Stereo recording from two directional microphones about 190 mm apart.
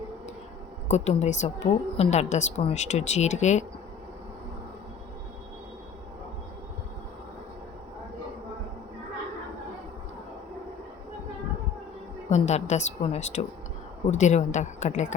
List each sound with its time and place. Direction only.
0.9 s a woman's voice: 35° left (ahead or behind)
12.3 s a woman's voice: 35° left (ahead or behind)